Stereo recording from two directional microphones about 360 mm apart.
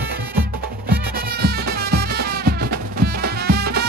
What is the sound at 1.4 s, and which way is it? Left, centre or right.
Music, right.